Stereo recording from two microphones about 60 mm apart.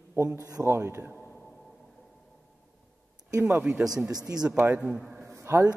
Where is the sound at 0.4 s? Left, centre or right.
Right.